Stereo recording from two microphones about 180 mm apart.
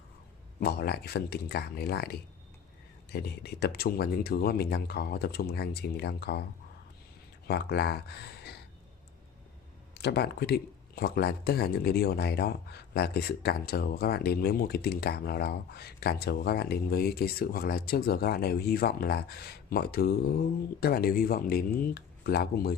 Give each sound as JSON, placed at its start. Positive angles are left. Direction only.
{"t": 0.6, "sound": "speech", "side_deg": 60}
{"t": 7.4, "sound": "speech", "side_deg": 60}
{"t": 10.0, "sound": "speech", "side_deg": 65}